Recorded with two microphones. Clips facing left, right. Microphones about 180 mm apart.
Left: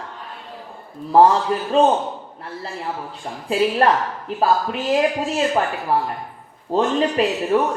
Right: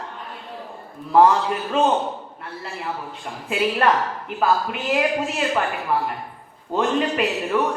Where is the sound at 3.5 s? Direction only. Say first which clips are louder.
Left 3 dB; 30° left (ahead or behind).